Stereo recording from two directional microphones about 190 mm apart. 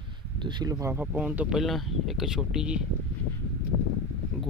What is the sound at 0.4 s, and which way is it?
Speech, 25° right (ahead or behind).